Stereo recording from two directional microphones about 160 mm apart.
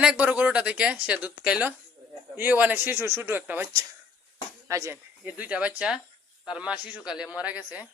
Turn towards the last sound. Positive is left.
turn(degrees=-10)  # may be behind; listen again after turning